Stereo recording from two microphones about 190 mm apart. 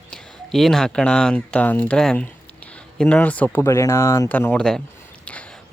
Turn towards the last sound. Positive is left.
turn(degrees=5)  # may be behind; listen again after turning